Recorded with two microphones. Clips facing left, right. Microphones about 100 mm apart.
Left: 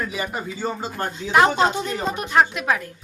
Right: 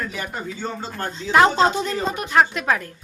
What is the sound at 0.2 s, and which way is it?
Speech, 10° left (ahead or behind).